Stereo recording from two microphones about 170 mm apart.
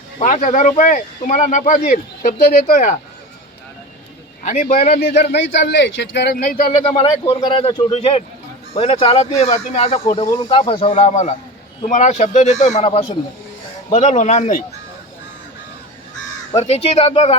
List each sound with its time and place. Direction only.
0.2 s speech: 45° left (ahead or behind)
4.4 s speech: 50° left (ahead or behind)
5.0 s speech: 85° left; by 6.7 s 55° left (ahead or behind)
6.9 s speech: 30° left (ahead or behind)
13.9 s speech: 40° left (ahead or behind)
16.6 s speech: 40° left (ahead or behind)